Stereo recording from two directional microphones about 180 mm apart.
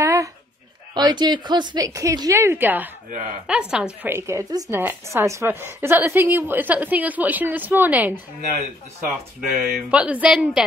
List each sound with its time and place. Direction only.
0.0 s a sound: 15° right (ahead or behind)
0.9 s a woman's voice: 25° right (ahead or behind)
9.6 s a woman's voice: 5° right (ahead or behind)